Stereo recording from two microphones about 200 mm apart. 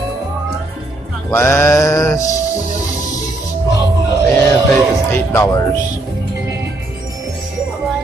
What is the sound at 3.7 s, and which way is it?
Music, 15° right (ahead or behind).